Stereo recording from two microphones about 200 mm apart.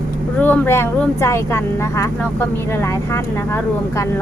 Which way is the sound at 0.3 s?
10° left (ahead or behind).